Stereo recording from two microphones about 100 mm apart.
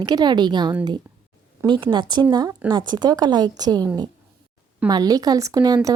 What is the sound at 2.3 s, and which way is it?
A woman's voice, 45° right (ahead or behind).